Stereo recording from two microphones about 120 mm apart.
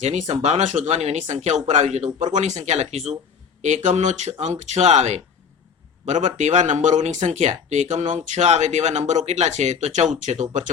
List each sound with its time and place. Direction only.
0.0 s speech: 75° right (ahead or behind)
2.2 s speech: 80° right; by 3.2 s 65° right (ahead or behind)
3.8 s speech: 80° right